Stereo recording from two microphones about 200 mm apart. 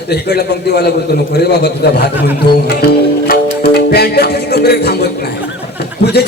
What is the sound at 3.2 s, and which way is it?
Music, 50° left (ahead or behind).